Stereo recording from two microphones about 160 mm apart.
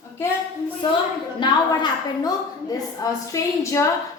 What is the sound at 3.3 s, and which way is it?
Speech, 20° left (ahead or behind).